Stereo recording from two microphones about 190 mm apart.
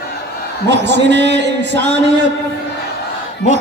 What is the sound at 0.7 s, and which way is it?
Speech, 65° right (ahead or behind).